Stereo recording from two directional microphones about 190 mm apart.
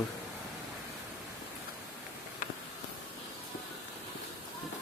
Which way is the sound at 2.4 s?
45° left (ahead or behind).